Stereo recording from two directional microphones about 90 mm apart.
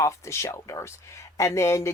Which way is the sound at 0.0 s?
35° left (ahead or behind).